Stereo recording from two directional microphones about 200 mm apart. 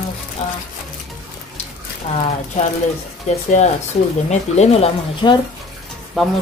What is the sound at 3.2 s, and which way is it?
Speech, 35° left (ahead or behind).